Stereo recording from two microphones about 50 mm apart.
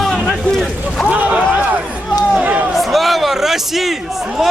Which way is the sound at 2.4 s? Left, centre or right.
Right.